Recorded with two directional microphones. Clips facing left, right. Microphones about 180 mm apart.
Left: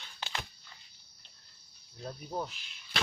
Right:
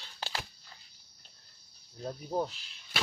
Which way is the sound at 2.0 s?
30° right (ahead or behind).